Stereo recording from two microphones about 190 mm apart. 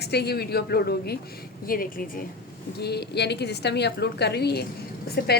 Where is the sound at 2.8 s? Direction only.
60° left (ahead or behind).